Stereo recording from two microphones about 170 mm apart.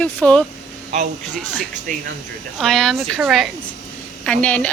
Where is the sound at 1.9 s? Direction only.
50° right (ahead or behind).